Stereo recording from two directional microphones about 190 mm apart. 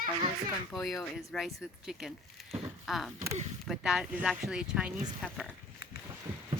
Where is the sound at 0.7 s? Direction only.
Centre (ahead or behind).